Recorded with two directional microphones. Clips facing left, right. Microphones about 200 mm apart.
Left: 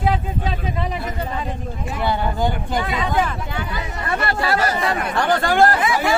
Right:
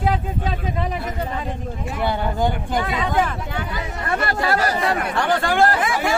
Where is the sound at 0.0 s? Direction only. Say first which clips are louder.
Left 1 dB; 45° right (ahead or behind).